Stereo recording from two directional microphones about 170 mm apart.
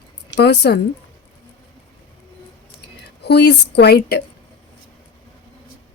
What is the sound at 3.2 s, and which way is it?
Speech, 75° left (ahead or behind).